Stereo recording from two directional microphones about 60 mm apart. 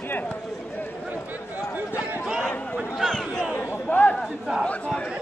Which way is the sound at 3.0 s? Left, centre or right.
Centre.